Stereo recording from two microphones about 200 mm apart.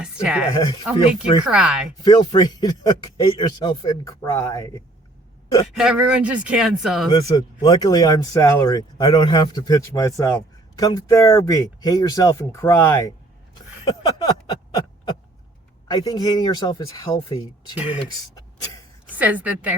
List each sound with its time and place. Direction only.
0.0 s speech: 5° right (ahead or behind)
0.5 s speech: 20° left (ahead or behind)
1.5 s speech: 5° right (ahead or behind)
2.0 s speech: 20° left (ahead or behind)
5.7 s speech: 5° right (ahead or behind)
7.1 s speech: 20° left (ahead or behind)
15.9 s speech: 20° left (ahead or behind)
17.7 s a woman's voice: 5° right (ahead or behind)
18.3 s a sound: 20° left (ahead or behind)
19.1 s a woman's voice: 10° right (ahead or behind)